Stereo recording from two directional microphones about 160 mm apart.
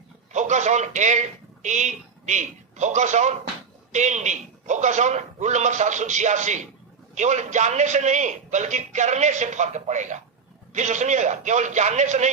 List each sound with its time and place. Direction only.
0.3 s a man's voice: 50° right (ahead or behind)